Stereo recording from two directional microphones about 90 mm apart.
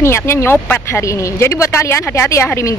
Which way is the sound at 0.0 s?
30° left (ahead or behind).